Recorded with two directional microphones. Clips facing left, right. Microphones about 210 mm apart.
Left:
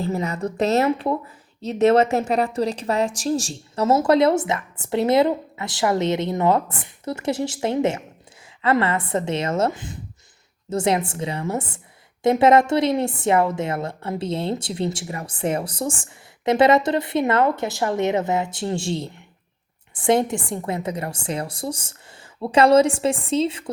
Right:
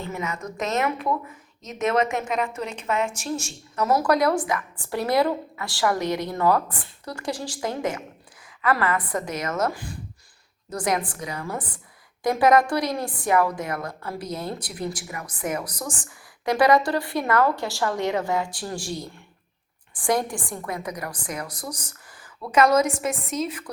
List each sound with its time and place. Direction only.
0.0 s a woman's voice: 35° left (ahead or behind)